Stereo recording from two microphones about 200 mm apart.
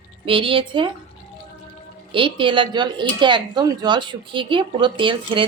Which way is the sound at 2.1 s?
25° right (ahead or behind).